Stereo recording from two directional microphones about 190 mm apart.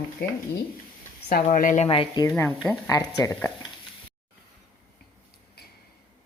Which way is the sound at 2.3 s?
10° left (ahead or behind).